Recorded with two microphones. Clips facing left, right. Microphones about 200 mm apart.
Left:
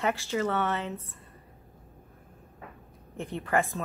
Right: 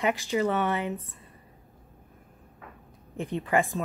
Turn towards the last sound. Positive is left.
turn(degrees=-15)  # may be behind; listen again after turning